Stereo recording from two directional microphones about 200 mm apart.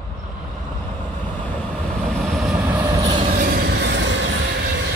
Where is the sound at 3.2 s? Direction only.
40° right (ahead or behind); by 4.8 s 65° right (ahead or behind).